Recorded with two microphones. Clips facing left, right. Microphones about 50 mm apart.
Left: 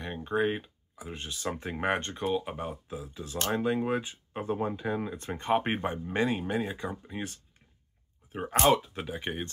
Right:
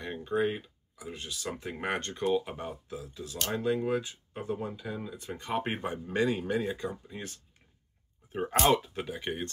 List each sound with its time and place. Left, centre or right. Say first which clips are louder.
0.2 s speech: left 1 dB; left
2.2 s speech: right 3 dB; centre
8.3 s speech: left 1 dB; centre